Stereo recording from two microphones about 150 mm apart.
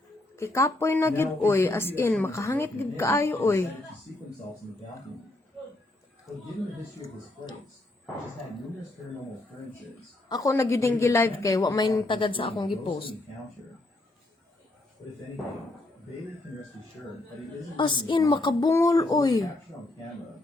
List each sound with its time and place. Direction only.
0.3 s a woman's voice: 20° left (ahead or behind)
10.2 s speech: 25° left (ahead or behind)
12.0 s a woman's voice: 35° left (ahead or behind)
17.7 s a woman's voice: 30° left (ahead or behind)